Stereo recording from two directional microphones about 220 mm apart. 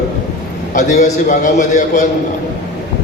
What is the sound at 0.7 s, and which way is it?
A man's voice, 35° left (ahead or behind).